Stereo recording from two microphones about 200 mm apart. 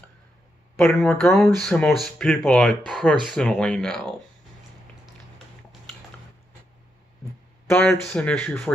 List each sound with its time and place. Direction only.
0.7 s speech: 5° left (ahead or behind)
7.7 s speech: 5° left (ahead or behind)